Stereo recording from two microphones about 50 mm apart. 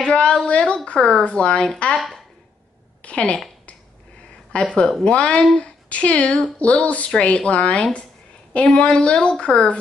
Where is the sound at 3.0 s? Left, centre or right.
Left.